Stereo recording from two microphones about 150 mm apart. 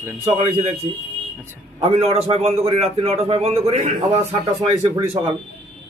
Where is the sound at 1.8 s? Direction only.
45° right (ahead or behind).